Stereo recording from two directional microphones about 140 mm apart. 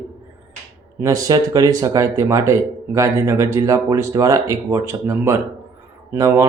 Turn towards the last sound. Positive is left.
turn(degrees=-20)  # may be behind; listen again after turning